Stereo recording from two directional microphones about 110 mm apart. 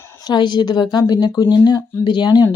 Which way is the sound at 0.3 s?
40° left (ahead or behind).